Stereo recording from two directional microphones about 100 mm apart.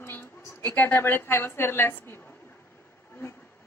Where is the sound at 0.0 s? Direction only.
25° left (ahead or behind).